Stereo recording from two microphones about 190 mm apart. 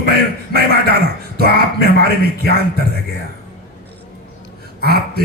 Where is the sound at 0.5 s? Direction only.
55° right (ahead or behind).